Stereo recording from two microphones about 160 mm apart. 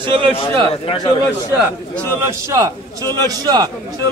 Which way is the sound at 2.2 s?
20° right (ahead or behind).